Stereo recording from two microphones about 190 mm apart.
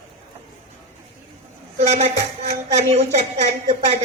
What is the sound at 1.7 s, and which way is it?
A woman's voice, 35° right (ahead or behind).